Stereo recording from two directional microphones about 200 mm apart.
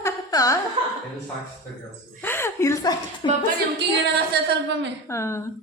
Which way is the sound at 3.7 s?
55° right (ahead or behind).